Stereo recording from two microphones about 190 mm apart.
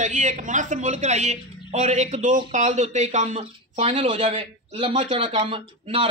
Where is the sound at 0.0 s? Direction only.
40° right (ahead or behind).